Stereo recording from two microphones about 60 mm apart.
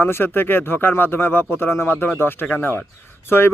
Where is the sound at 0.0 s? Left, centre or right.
Left.